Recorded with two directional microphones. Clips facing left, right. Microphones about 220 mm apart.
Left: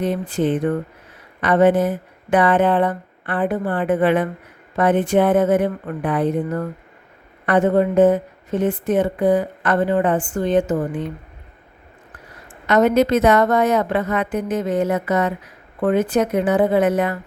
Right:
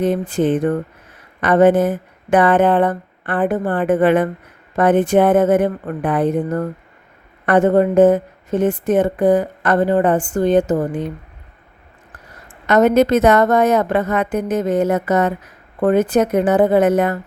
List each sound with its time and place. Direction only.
0.0 s a woman's voice: 50° right (ahead or behind)
12.6 s a woman's voice: 45° right (ahead or behind)